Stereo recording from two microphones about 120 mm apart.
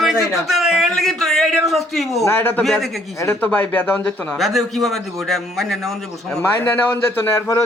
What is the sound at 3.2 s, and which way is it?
Speech, 15° left (ahead or behind).